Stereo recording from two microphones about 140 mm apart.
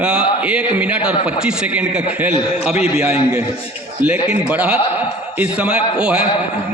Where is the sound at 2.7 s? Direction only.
45° left (ahead or behind).